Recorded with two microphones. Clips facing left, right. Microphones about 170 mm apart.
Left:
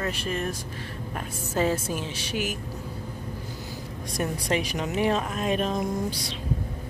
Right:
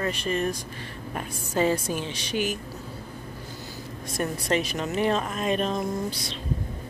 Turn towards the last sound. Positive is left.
turn(degrees=15)  # may be behind; listen again after turning